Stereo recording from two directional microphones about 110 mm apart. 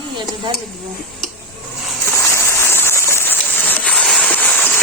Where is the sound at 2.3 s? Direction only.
25° left (ahead or behind).